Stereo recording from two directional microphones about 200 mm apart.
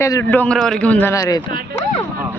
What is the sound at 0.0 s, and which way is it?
A man's voice, 15° left (ahead or behind).